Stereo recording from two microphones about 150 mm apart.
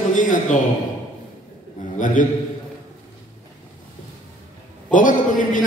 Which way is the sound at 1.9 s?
60° left (ahead or behind).